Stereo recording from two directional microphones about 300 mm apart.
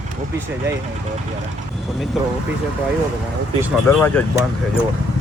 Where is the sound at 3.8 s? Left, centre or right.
Centre.